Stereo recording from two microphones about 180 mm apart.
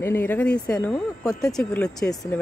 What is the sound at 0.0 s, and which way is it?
Speech, 10° left (ahead or behind).